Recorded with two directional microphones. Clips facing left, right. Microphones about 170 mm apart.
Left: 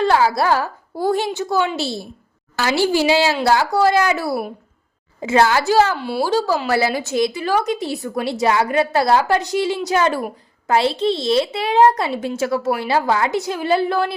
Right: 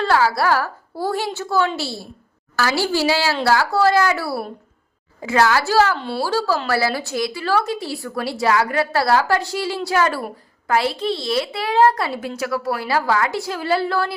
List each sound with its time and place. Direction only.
0.0 s a woman's voice: 20° left (ahead or behind)